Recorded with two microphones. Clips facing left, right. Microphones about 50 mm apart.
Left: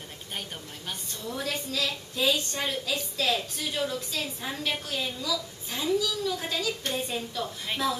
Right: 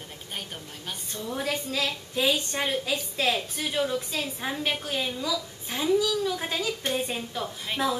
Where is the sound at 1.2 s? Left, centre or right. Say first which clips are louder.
Right 2 dB; centre.